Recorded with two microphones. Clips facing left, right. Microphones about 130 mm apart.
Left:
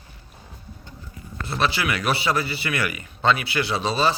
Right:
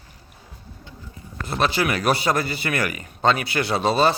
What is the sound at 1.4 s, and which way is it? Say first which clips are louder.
A man's voice: right 2 dB; 45° right (ahead or behind).